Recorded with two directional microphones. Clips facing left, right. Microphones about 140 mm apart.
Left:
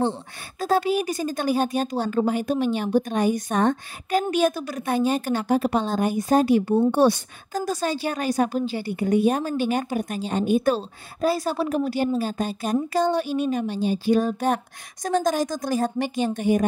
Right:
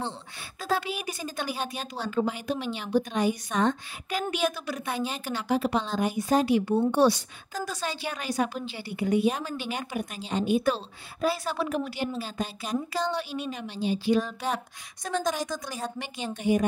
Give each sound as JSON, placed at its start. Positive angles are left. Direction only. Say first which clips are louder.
{"t": 0.6, "sound": "a woman's voice", "louder": "left 8 dB", "side_deg": 45}